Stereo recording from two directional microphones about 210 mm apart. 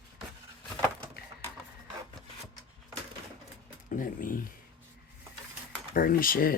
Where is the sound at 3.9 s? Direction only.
40° left (ahead or behind).